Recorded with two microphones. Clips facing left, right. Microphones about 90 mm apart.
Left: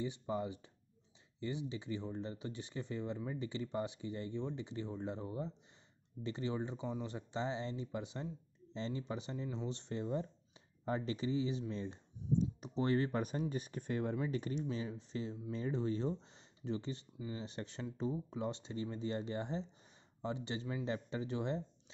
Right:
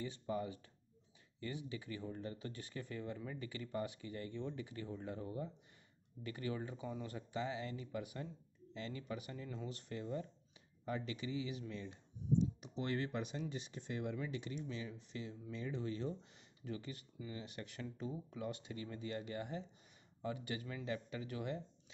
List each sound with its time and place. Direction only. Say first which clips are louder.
0.0 s speech: left 3 dB; 20° left (ahead or behind)